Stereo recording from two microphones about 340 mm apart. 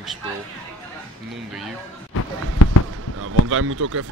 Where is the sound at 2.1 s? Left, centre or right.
Left.